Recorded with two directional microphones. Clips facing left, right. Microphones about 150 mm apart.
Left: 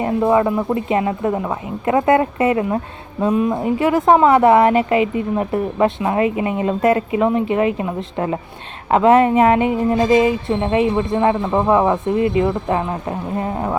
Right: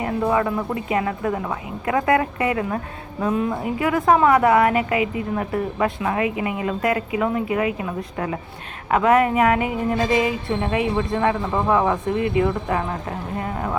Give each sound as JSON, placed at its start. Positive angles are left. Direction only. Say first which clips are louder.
{"t": 0.0, "sound": "speech", "louder": "left 5 dB", "side_deg": 25}